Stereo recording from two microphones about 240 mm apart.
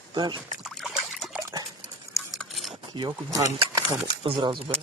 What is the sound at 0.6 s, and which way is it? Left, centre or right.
Trickle, centre.